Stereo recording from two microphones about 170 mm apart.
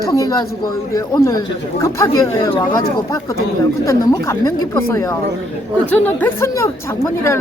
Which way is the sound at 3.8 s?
20° left (ahead or behind).